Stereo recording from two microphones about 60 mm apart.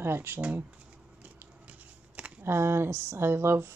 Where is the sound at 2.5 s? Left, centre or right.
Right.